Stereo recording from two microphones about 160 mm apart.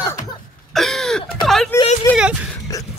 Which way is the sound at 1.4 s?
Centre (ahead or behind).